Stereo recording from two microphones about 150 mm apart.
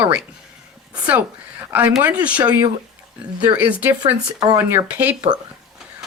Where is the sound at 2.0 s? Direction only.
10° right (ahead or behind).